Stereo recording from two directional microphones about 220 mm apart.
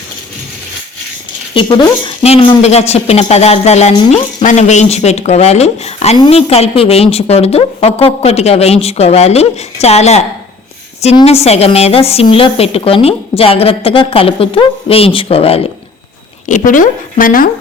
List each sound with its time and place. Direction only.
1.5 s a woman's voice: 25° left (ahead or behind); by 17.5 s 40° left (ahead or behind)